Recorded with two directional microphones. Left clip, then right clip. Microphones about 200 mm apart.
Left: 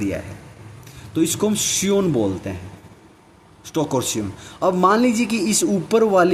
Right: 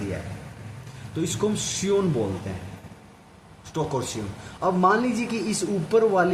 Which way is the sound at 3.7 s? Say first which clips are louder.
Left 6 dB; 45° left (ahead or behind).